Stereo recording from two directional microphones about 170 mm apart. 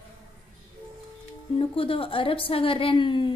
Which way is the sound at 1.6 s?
30° left (ahead or behind).